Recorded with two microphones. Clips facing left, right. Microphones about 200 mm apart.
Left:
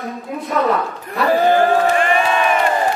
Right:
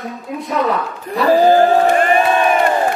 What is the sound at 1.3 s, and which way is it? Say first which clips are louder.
Crowd: right 3 dB; 35° right (ahead or behind).